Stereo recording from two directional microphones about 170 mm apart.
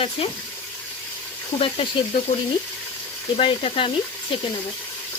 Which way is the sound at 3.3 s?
35° left (ahead or behind).